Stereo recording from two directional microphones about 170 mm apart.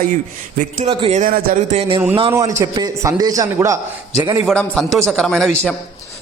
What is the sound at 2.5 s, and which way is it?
A man's voice, 25° right (ahead or behind).